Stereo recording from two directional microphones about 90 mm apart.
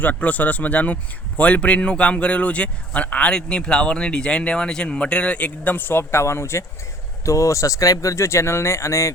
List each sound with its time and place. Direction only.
0.0 s speech: 15° left (ahead or behind); by 9.1 s 35° left (ahead or behind)